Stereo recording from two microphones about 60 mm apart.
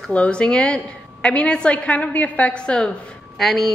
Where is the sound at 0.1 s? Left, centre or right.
Centre.